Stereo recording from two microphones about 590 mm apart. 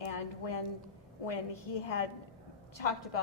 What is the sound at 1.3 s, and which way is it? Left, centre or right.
A woman's voice, left.